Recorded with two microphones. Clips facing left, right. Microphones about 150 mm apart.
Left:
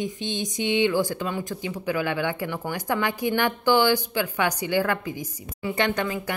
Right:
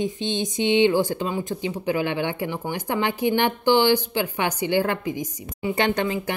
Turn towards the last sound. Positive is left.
turn(degrees=-30)  # may be behind; listen again after turning